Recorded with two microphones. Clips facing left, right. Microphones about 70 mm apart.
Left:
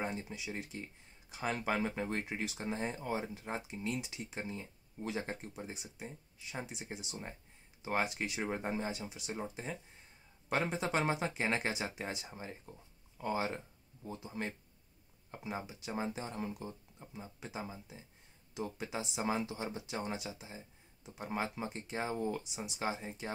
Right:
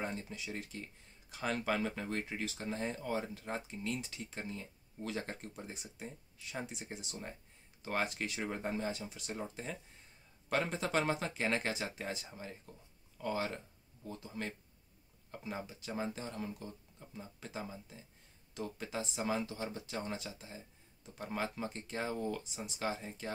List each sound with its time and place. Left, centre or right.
0.0 s speech: centre
5.5 s speech: centre
12.4 s speech: left